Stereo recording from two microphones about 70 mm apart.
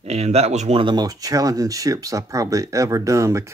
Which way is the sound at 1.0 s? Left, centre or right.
Right.